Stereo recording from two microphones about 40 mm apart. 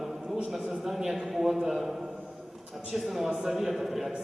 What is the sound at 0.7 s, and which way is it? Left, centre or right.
A man's voice, centre.